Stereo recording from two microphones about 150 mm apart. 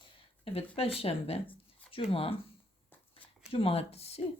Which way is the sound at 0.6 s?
40° left (ahead or behind).